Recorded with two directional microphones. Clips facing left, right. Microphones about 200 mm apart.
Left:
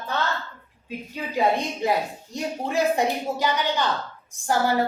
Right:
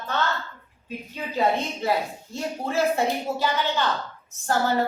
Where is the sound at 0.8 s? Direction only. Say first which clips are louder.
Left 1 dB; 15° left (ahead or behind).